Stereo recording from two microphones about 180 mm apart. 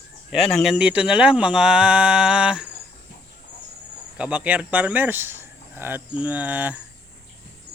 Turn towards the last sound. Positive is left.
turn(degrees=-10)  # may be behind; listen again after turning